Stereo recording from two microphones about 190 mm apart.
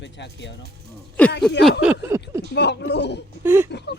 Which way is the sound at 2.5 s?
60° left (ahead or behind).